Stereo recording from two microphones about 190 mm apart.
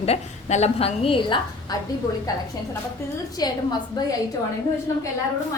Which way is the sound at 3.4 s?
20° left (ahead or behind).